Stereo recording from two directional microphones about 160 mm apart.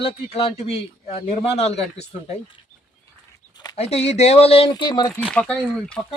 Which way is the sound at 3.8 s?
40° left (ahead or behind).